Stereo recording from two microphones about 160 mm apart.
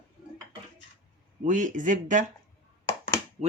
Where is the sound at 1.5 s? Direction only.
55° right (ahead or behind).